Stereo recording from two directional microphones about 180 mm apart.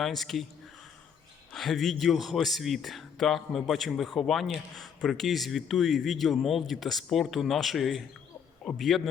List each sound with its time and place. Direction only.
0.0 s speech: centre (ahead or behind)
1.5 s speech: centre (ahead or behind)